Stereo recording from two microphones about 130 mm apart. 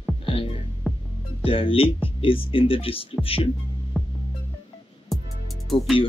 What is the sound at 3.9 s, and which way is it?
Music, 5° right (ahead or behind).